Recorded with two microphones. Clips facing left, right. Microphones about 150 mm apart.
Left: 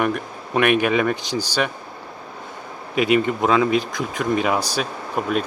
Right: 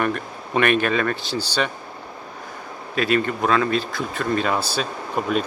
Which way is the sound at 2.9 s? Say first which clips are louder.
Left 3 dB; 15° left (ahead or behind).